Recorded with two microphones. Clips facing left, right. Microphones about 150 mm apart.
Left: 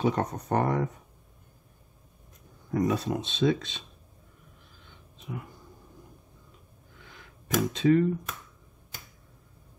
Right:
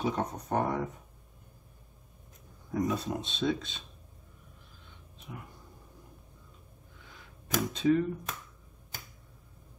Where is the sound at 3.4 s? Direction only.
90° left.